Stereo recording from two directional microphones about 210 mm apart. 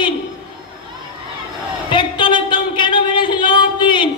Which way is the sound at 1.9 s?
20° left (ahead or behind).